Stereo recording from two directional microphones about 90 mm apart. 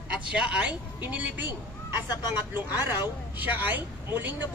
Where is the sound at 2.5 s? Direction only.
20° right (ahead or behind).